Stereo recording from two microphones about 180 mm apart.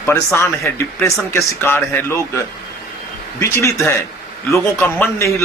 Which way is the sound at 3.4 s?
15° left (ahead or behind).